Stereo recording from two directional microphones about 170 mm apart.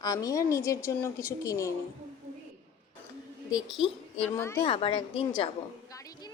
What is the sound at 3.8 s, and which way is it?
Speech, 35° left (ahead or behind).